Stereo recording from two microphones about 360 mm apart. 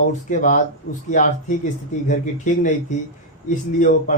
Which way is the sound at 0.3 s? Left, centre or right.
Left.